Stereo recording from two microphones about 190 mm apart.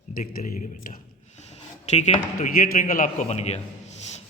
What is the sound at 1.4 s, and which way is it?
A man's voice, 35° left (ahead or behind).